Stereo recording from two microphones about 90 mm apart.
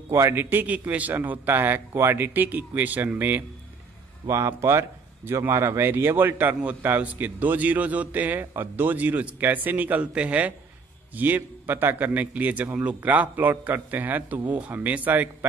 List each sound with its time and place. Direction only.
0.1 s speech: 30° right (ahead or behind)
4.3 s speech: 30° right (ahead or behind)